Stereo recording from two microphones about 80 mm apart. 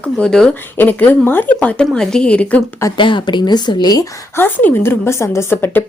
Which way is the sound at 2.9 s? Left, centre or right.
Left.